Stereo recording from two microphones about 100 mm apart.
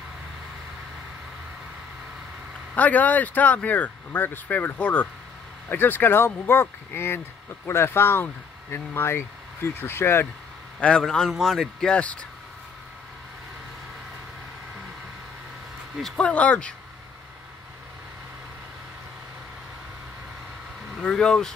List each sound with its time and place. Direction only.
2.7 s speech: 15° left (ahead or behind)
10.8 s speech: 10° left (ahead or behind)
16.0 s speech: 10° left (ahead or behind)
21.0 s speech: 5° left (ahead or behind)